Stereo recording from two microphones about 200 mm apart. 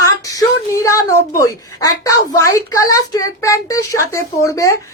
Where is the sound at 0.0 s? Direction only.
15° left (ahead or behind).